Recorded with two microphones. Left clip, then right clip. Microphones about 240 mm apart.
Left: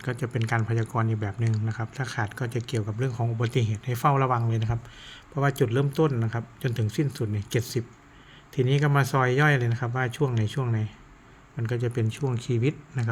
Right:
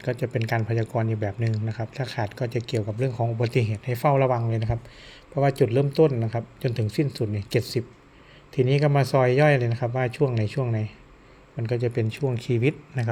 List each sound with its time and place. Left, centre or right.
0.0 s speech: centre